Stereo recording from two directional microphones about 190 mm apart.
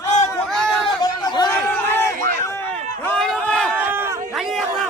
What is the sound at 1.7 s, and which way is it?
Crowd, 10° left (ahead or behind).